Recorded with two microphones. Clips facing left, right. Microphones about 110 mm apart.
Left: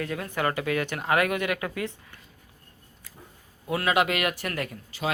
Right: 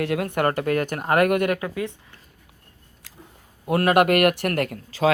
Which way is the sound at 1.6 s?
15° right (ahead or behind).